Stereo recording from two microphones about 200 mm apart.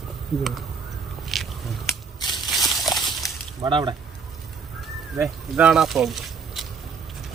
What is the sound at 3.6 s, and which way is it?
Speech, 25° right (ahead or behind).